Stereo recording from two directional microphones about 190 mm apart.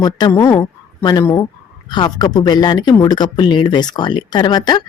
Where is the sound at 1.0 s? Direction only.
20° left (ahead or behind).